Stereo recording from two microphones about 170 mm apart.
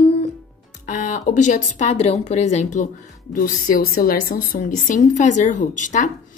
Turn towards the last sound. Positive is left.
turn(degrees=45)  # may be behind; listen again after turning